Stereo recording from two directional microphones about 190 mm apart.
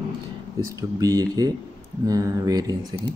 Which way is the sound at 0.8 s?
20° right (ahead or behind).